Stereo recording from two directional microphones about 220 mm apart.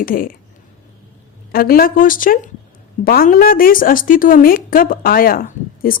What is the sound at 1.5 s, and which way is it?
A woman's voice, 40° left (ahead or behind).